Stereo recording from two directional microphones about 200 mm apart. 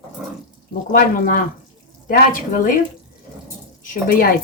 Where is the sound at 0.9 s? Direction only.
45° left (ahead or behind).